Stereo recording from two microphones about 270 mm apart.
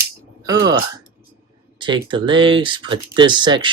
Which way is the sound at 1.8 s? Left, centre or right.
Centre.